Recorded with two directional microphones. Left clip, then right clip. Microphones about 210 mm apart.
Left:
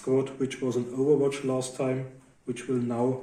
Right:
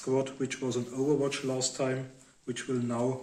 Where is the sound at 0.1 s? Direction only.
50° right (ahead or behind).